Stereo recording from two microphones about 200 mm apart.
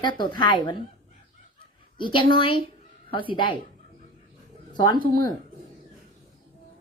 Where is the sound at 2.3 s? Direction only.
25° left (ahead or behind).